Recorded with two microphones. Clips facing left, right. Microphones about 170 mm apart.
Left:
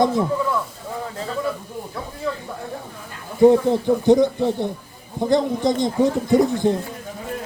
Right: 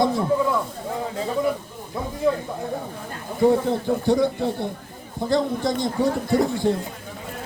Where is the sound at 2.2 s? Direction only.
15° right (ahead or behind).